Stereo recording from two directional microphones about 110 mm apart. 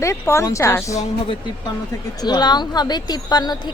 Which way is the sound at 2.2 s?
40° left (ahead or behind).